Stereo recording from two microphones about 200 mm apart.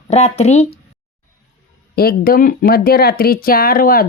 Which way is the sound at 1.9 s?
50° left (ahead or behind).